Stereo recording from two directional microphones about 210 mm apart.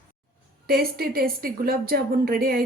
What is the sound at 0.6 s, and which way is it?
A woman's voice, 45° right (ahead or behind).